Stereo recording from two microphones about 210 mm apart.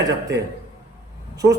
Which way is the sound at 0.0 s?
15° right (ahead or behind).